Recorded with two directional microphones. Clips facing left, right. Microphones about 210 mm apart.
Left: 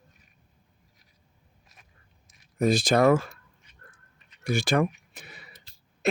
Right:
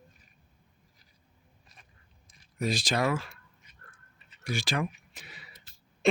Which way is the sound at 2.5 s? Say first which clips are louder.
Left 8 dB; 50° left (ahead or behind).